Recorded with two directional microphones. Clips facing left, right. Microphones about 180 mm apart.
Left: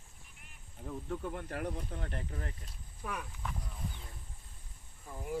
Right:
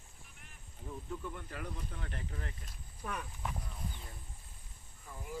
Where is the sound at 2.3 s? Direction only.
35° left (ahead or behind).